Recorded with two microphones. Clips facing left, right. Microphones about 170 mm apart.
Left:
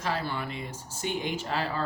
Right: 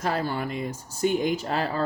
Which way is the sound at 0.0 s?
45° right (ahead or behind).